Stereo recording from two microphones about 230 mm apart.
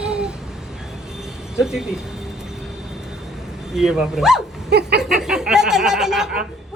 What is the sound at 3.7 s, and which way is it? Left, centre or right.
Speech, centre.